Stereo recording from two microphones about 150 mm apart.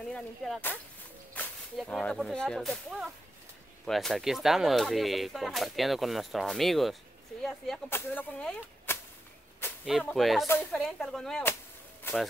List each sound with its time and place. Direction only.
0.1 s speech: 10° left (ahead or behind)
1.8 s speech: 5° left (ahead or behind)
7.9 s speech: 10° left (ahead or behind)
9.6 s a sound: 15° left (ahead or behind)
10.0 s speech: centre (ahead or behind)